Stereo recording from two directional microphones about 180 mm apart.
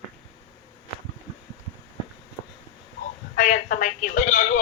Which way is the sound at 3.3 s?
50° left (ahead or behind).